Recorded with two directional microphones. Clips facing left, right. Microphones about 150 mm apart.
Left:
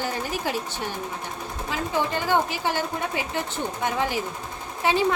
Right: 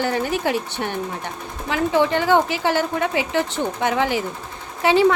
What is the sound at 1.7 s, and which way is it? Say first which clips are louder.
A woman's voice: right 8 dB; 75° right (ahead or behind).